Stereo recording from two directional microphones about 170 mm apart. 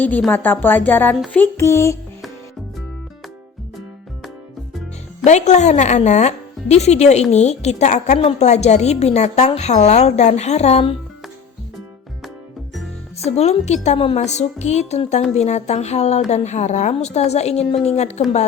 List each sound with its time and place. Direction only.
0.3 s speech: 10° left (ahead or behind)
5.2 s speech: 45° left (ahead or behind)
13.3 s speech: 40° left (ahead or behind)